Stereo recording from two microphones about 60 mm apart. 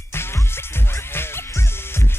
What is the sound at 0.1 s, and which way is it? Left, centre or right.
Music, left.